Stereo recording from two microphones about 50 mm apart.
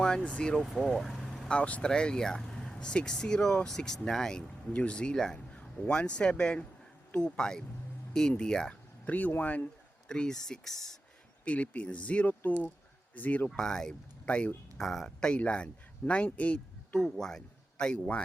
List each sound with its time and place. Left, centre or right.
0.0 s speech: left
0.6 s speech: centre
0.9 s vehicle: centre
1.5 s speech: left
9.0 s speech: left
10.1 s speech: centre
11.4 s speech: left
13.6 s speech: centre
14.3 s speech: left
14.8 s speech: centre
15.4 s speech: left
17.0 s speech: centre